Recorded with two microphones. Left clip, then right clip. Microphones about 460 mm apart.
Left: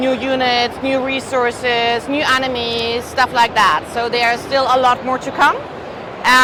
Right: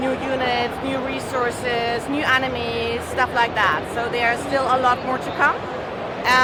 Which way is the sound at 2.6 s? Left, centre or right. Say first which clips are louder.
Left 5 dB; left.